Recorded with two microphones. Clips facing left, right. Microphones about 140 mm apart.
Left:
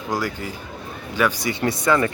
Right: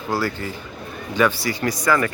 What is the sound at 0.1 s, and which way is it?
Speech, 15° left (ahead or behind).